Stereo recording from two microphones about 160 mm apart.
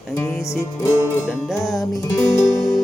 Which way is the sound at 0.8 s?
20° left (ahead or behind).